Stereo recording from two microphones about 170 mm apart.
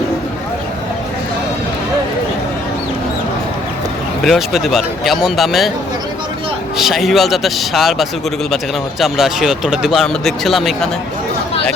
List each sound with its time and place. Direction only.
4.2 s speech: centre (ahead or behind)
6.7 s speech: centre (ahead or behind)